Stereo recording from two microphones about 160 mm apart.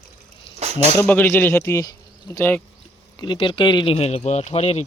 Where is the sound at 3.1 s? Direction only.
30° left (ahead or behind).